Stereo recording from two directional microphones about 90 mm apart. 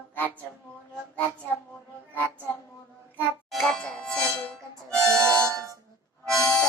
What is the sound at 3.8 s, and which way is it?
Music, 10° left (ahead or behind).